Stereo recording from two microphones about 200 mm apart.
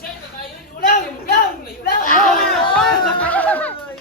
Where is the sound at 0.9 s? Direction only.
45° left (ahead or behind).